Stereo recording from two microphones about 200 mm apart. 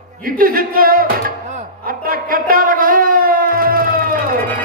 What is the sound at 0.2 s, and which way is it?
Speech, 45° right (ahead or behind).